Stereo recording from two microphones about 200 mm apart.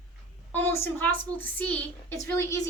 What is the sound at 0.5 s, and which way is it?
A woman's voice, 10° left (ahead or behind).